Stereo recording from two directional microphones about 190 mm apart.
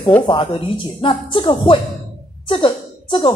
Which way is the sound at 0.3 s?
25° left (ahead or behind).